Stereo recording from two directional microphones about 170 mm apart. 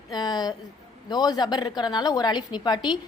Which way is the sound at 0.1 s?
25° left (ahead or behind).